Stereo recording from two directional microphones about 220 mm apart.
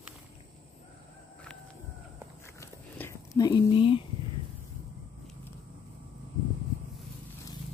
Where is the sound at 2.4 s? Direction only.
10° left (ahead or behind).